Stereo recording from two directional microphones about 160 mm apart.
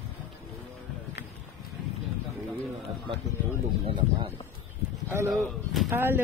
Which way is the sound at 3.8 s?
30° right (ahead or behind).